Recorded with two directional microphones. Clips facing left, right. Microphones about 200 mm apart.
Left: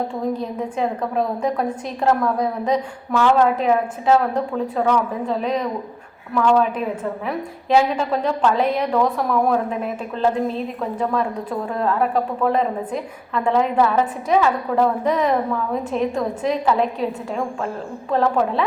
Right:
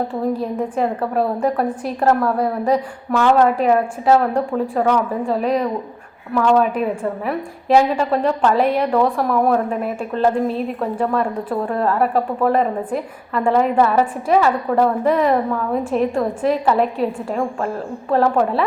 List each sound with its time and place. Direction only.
0.1 s a woman's voice: 5° right (ahead or behind)